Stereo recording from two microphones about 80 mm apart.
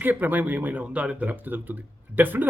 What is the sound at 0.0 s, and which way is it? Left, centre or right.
Speech, right.